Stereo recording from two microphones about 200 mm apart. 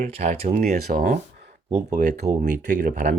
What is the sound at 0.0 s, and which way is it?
Speech, 35° right (ahead or behind).